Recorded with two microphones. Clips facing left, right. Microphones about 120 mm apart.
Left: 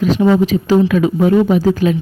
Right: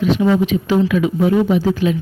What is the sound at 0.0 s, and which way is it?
Speech, 40° left (ahead or behind).